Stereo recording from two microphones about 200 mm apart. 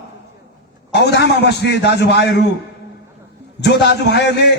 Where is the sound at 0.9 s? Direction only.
55° left (ahead or behind).